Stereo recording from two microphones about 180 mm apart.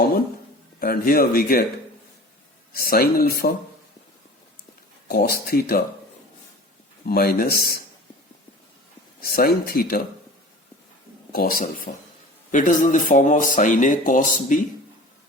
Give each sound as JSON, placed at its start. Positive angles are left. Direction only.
{"t": 0.8, "sound": "speech", "side_deg": 55}
{"t": 2.7, "sound": "speech", "side_deg": 55}
{"t": 5.0, "sound": "speech", "side_deg": 60}
{"t": 7.0, "sound": "speech", "side_deg": 55}
{"t": 9.2, "sound": "speech", "side_deg": 55}
{"t": 11.3, "sound": "speech", "side_deg": 55}